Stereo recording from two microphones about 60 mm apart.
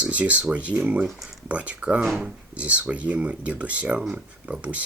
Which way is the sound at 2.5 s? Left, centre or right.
Right.